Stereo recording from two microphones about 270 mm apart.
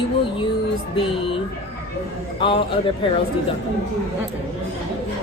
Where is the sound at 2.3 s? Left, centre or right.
Centre.